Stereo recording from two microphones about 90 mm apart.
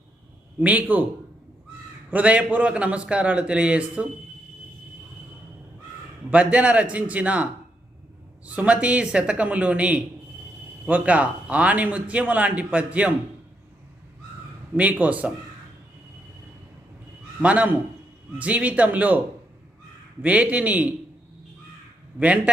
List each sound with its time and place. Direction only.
0.6 s a man's voice: 20° right (ahead or behind)
2.0 s a man's voice: 15° right (ahead or behind)
6.3 s a man's voice: 15° right (ahead or behind)
8.4 s a man's voice: 15° right (ahead or behind)
14.8 s a man's voice: 15° right (ahead or behind)
17.4 s a man's voice: 15° right (ahead or behind)
20.2 s a man's voice: 15° right (ahead or behind)
22.2 s a man's voice: 15° right (ahead or behind)